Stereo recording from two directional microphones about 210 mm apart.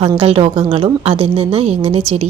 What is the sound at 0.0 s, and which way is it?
Speech, 25° right (ahead or behind).